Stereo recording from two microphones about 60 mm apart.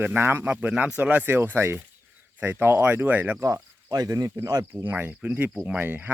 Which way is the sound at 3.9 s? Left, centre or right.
Right.